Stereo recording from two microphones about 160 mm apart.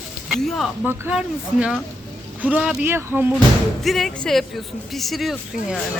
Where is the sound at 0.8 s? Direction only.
10° right (ahead or behind).